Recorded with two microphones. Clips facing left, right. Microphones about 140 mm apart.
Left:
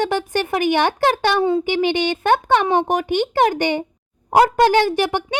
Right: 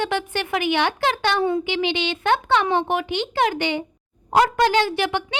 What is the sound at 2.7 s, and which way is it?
Speech, 15° left (ahead or behind).